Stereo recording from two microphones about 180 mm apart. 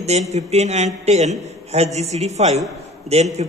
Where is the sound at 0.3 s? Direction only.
40° right (ahead or behind).